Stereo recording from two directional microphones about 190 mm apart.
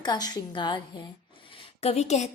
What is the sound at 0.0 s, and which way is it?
Speech, 20° left (ahead or behind).